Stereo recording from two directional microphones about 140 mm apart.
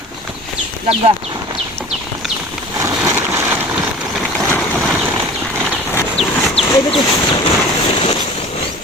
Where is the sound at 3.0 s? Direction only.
15° right (ahead or behind).